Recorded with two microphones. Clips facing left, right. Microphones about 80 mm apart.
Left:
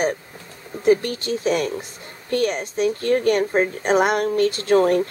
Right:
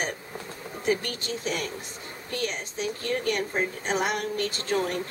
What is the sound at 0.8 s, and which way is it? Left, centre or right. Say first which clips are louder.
A woman's voice: left 10 dB; left.